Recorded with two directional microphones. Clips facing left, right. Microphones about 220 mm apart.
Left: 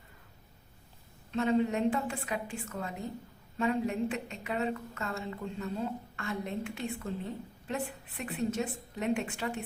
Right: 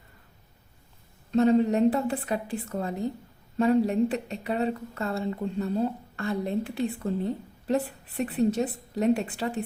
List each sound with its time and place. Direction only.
1.3 s speech: 40° right (ahead or behind)